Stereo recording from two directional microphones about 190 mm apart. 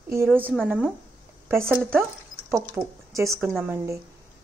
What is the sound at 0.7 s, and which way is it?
A woman's voice, 5° right (ahead or behind).